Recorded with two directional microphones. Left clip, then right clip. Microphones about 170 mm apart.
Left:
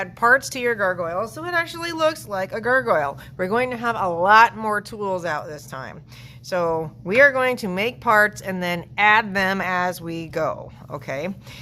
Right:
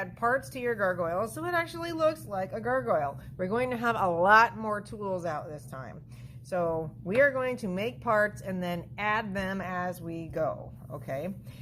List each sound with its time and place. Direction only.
0.0 s speech: 25° left (ahead or behind)
0.8 s speech: 10° left (ahead or behind)
3.6 s speech: centre (ahead or behind)
4.5 s speech: 20° left (ahead or behind)